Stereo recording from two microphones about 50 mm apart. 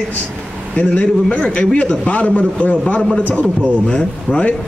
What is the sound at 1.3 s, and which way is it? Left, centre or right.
Speech, left.